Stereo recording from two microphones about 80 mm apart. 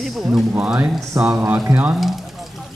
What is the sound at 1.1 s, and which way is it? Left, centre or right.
Speech, right.